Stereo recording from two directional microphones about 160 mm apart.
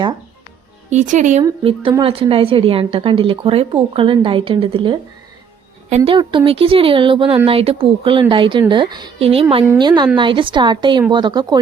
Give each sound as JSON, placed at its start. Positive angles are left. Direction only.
{"t": 0.9, "sound": "speech", "side_deg": -50}
{"t": 1.9, "sound": "a woman's voice", "side_deg": -30}
{"t": 6.1, "sound": "a woman's voice", "side_deg": -30}